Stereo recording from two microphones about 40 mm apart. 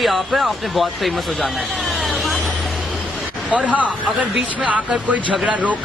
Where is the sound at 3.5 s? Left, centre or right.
Right.